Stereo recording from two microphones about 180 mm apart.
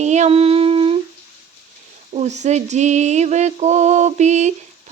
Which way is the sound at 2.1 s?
40° right (ahead or behind).